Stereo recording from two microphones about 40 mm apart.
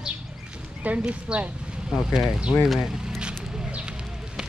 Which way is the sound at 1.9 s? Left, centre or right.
Centre.